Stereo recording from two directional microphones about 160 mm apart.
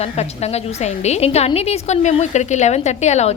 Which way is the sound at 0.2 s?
45° left (ahead or behind).